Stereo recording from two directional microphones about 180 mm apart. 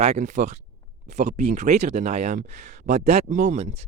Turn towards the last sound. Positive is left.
turn(degrees=-40)  # may be behind; listen again after turning